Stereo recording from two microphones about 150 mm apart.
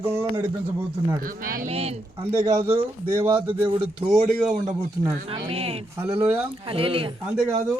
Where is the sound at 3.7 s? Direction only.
35° right (ahead or behind).